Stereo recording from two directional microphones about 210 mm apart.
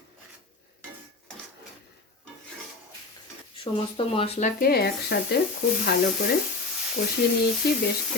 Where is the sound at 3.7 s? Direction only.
25° left (ahead or behind).